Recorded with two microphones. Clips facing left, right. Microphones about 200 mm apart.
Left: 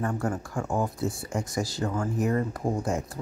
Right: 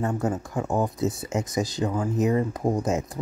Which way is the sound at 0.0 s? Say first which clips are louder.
Right 3 dB; 20° right (ahead or behind).